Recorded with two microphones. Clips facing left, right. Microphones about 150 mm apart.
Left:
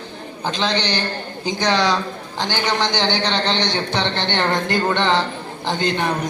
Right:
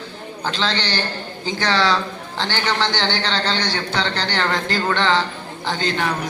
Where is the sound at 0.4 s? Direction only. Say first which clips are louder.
Left 2 dB; 15° left (ahead or behind).